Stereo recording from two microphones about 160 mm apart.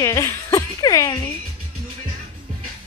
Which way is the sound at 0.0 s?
20° left (ahead or behind).